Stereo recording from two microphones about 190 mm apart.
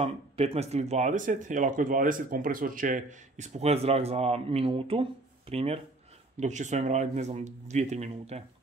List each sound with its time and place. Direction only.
0.0 s speech: 30° right (ahead or behind)